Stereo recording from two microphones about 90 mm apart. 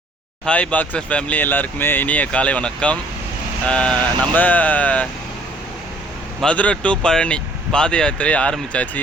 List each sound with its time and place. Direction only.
0.4 s speech: 15° left (ahead or behind)
6.4 s speech: 15° left (ahead or behind)